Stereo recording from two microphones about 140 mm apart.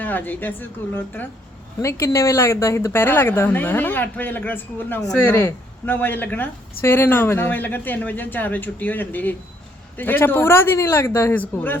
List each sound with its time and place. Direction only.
0.0 s a woman's voice: 15° left (ahead or behind)